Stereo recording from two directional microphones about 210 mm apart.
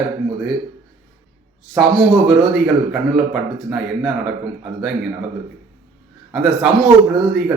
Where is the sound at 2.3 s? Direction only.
5° right (ahead or behind).